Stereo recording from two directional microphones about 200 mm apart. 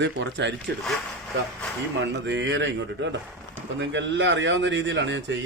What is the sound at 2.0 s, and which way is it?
A man's voice, 65° right (ahead or behind).